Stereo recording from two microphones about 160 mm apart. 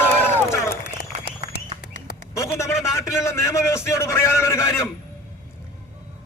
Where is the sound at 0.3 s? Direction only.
15° left (ahead or behind).